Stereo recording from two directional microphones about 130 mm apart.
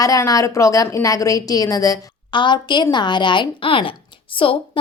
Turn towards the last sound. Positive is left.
turn(degrees=45)  # may be behind; listen again after turning